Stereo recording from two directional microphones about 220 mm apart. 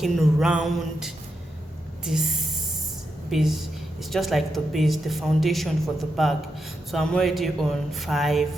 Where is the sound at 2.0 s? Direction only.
Centre (ahead or behind).